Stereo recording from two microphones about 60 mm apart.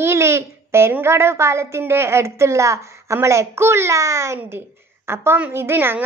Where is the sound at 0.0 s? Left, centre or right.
Right.